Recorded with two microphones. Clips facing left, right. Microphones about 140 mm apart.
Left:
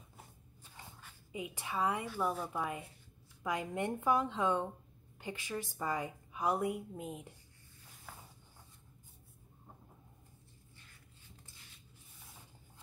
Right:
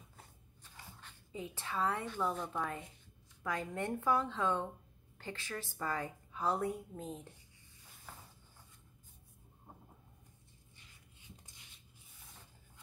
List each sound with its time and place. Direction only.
1.0 s a woman's voice: 15° left (ahead or behind)